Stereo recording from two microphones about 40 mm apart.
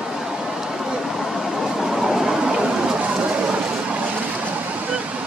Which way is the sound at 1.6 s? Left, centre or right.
Centre.